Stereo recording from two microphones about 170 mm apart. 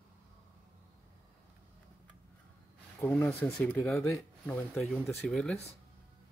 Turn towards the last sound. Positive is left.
turn(degrees=0)  # may be behind; listen again after turning